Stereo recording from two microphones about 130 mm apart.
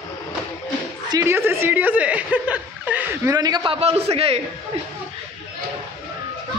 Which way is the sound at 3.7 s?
55° right (ahead or behind).